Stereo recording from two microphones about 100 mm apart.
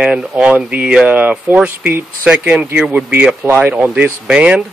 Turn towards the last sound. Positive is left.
turn(degrees=-10)  # may be behind; listen again after turning